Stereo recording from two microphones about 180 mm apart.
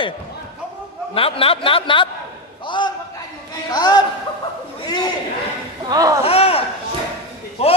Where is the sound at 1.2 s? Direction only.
30° left (ahead or behind).